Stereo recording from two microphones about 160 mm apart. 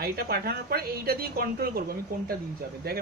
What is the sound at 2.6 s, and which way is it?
Speech, 80° right.